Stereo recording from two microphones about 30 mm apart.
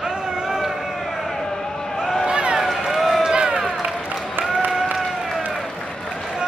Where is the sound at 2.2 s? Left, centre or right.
Right.